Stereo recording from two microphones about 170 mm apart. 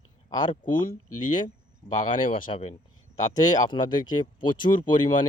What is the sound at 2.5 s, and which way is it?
Speech, 35° left (ahead or behind).